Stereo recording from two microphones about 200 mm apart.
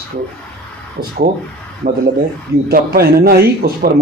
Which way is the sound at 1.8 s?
55° right (ahead or behind).